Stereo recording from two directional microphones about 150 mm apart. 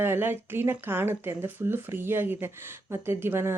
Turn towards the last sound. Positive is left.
turn(degrees=-15)  # may be behind; listen again after turning